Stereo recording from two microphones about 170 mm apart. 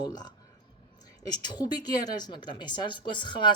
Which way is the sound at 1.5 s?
25° left (ahead or behind).